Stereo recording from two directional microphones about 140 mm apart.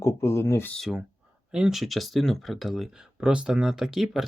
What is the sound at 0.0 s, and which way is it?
Speech, 20° left (ahead or behind).